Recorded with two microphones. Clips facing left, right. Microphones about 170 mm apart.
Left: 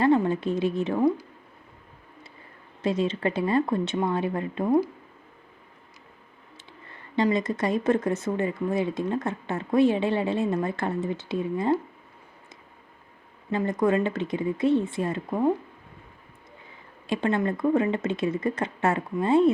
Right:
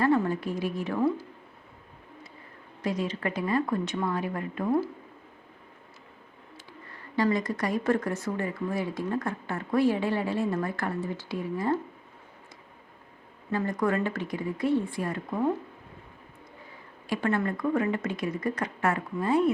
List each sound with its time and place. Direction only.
0.0 s a woman's voice: 20° left (ahead or behind)
2.8 s speech: 25° left (ahead or behind)
7.2 s speech: 20° left (ahead or behind)
13.5 s speech: 20° left (ahead or behind)
17.1 s speech: 20° left (ahead or behind)